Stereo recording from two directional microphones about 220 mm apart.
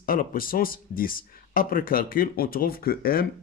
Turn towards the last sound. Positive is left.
turn(degrees=45)  # may be behind; listen again after turning